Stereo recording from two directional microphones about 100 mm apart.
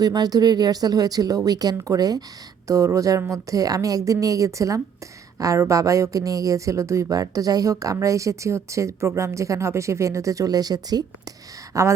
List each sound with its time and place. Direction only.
0.0 s a woman's voice: 40° right (ahead or behind)